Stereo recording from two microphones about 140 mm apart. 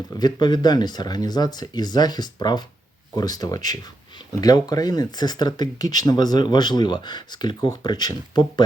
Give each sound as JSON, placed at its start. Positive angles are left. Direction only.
{"t": 0.1, "sound": "speech", "side_deg": 30}